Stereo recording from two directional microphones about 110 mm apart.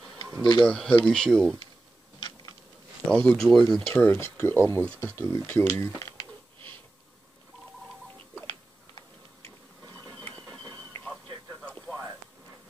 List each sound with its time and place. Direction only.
0.4 s speech: 45° left (ahead or behind)
0.7 s speech: 10° left (ahead or behind)
3.1 s speech: 5° left (ahead or behind)
3.9 s speech: 25° left (ahead or behind)
10.0 s a sound: 10° left (ahead or behind)
10.9 s a sound: 20° left (ahead or behind)